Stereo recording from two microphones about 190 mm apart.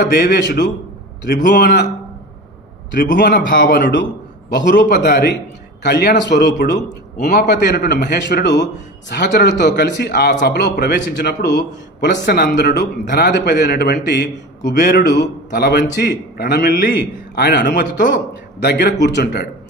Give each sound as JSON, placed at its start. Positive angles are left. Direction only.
{"t": 0.0, "sound": "a man's voice", "side_deg": 55}
{"t": 1.2, "sound": "a man's voice", "side_deg": 45}
{"t": 2.9, "sound": "a man's voice", "side_deg": 45}
{"t": 3.2, "sound": "a man's voice", "side_deg": 60}